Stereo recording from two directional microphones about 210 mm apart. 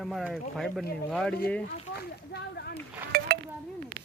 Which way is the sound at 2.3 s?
50° left (ahead or behind).